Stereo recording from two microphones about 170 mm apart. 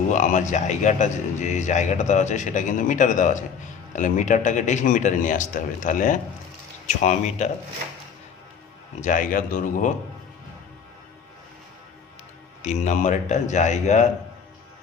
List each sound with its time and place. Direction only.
0.1 s a man's voice: 45° left (ahead or behind)
9.0 s a man's voice: 50° left (ahead or behind)
12.6 s a man's voice: 45° left (ahead or behind)